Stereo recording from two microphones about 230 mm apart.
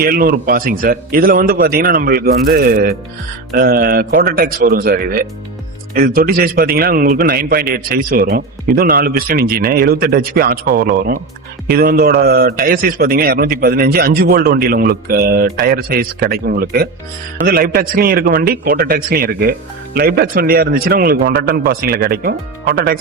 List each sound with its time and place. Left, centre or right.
0.0 s a man's voice: right